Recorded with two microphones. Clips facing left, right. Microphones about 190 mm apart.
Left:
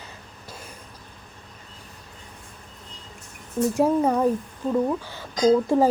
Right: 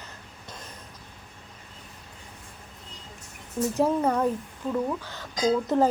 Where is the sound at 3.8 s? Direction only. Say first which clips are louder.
Left 3 dB; 10° left (ahead or behind).